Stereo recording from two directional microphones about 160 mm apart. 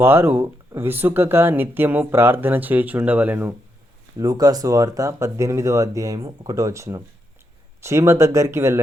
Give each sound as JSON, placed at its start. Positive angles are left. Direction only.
{"t": 0.0, "sound": "speech", "side_deg": -15}
{"t": 4.2, "sound": "speech", "side_deg": -25}